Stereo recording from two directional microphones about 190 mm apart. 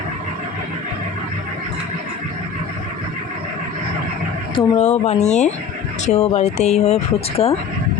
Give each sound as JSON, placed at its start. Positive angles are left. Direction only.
{"t": 4.5, "sound": "a woman's voice", "side_deg": 35}